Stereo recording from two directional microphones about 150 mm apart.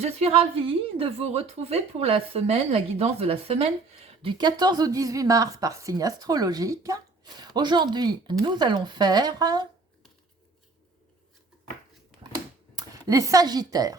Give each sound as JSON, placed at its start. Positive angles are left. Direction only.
{"t": 0.0, "sound": "a woman's voice", "side_deg": -40}
{"t": 12.7, "sound": "speech", "side_deg": -20}